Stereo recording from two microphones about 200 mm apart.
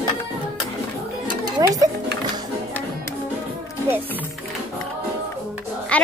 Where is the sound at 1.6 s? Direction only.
15° right (ahead or behind).